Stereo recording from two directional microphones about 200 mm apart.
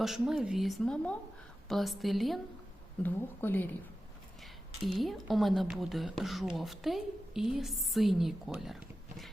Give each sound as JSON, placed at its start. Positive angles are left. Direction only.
{"t": 0.0, "sound": "speech", "side_deg": 0}
{"t": 4.8, "sound": "speech", "side_deg": 0}